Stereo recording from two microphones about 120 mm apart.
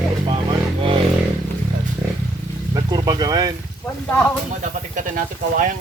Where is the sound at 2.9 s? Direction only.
35° right (ahead or behind).